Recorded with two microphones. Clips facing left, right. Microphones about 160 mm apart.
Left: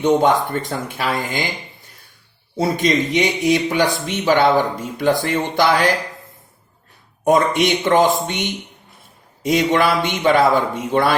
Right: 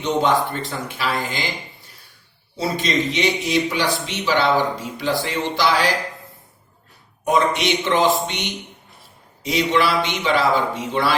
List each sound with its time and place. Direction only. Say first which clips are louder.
0.0 s speech: left 4 dB; 50° left (ahead or behind)
7.3 s speech: left 4 dB; 50° left (ahead or behind)